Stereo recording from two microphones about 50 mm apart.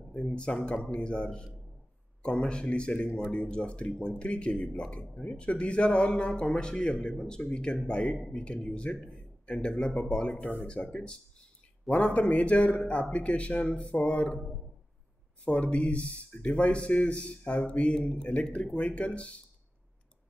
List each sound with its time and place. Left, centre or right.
0.1 s speech: centre
10.3 s speech: left
10.7 s speech: left
15.4 s speech: left